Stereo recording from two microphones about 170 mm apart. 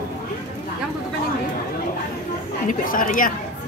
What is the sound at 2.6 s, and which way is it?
Speech, 50° left (ahead or behind).